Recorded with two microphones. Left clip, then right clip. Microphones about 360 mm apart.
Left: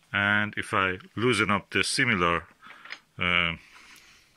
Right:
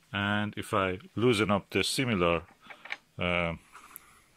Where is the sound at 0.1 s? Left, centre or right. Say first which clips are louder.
Left 7 dB; centre.